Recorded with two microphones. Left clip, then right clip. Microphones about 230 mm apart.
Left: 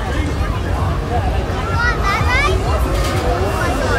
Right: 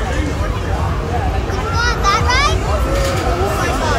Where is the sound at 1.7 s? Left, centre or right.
Right.